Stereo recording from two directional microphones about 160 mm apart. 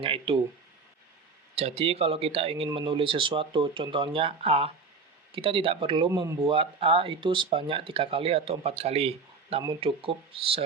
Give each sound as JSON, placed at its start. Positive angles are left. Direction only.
{"t": 0.0, "sound": "speech", "side_deg": -35}
{"t": 1.5, "sound": "speech", "side_deg": -40}
{"t": 6.5, "sound": "speech", "side_deg": -35}